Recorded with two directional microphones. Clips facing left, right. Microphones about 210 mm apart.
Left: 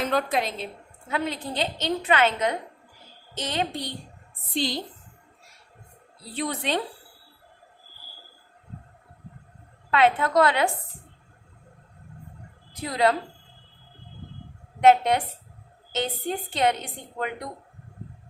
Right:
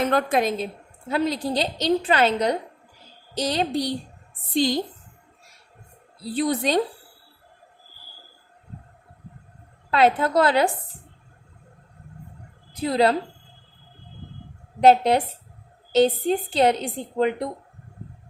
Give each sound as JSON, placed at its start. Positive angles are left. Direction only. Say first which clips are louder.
{"t": 0.0, "sound": "a woman's voice", "louder": "right 4 dB", "side_deg": -55}
{"t": 6.2, "sound": "a woman's voice", "louder": "right 6 dB", "side_deg": -35}
{"t": 9.9, "sound": "a woman's voice", "louder": "right 2 dB", "side_deg": -35}
{"t": 12.9, "sound": "a woman's voice", "louder": "right 3 dB", "side_deg": -30}
{"t": 14.8, "sound": "a woman's voice", "louder": "right 2 dB", "side_deg": -35}